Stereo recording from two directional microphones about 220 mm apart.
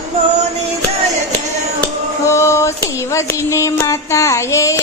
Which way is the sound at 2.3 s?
10° left (ahead or behind).